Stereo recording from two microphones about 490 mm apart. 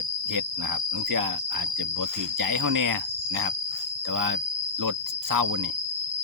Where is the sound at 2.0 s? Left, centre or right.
Right.